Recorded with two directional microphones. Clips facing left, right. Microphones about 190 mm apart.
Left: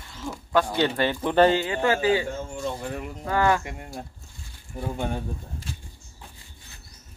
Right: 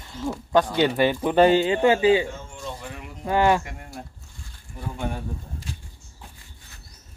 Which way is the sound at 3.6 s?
20° left (ahead or behind).